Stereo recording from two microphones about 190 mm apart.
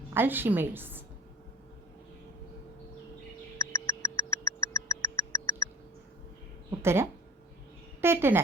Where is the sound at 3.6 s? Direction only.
15° left (ahead or behind).